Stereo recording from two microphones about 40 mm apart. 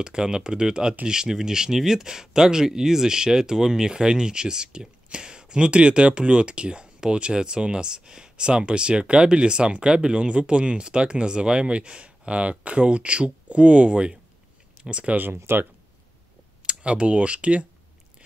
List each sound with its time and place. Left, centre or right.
0.0 s speech: right
15.3 s speech: right
16.6 s speech: right